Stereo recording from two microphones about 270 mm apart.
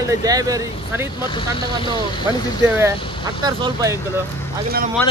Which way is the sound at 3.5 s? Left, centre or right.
Centre.